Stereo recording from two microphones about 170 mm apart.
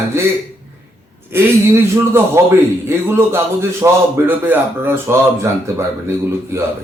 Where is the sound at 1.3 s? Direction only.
15° right (ahead or behind).